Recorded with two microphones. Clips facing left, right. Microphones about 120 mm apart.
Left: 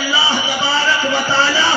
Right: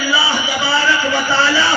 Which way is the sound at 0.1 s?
25° left (ahead or behind).